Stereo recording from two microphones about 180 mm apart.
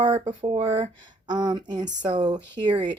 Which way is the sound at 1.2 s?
25° right (ahead or behind).